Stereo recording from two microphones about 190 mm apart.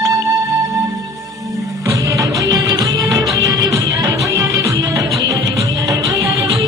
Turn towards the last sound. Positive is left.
turn(degrees=-15)  # may be behind; listen again after turning